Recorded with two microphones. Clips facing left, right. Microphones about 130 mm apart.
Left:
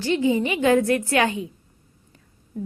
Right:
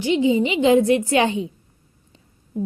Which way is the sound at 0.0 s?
20° right (ahead or behind).